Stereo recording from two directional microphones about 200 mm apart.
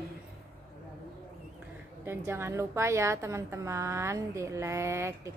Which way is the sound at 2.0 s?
10° right (ahead or behind).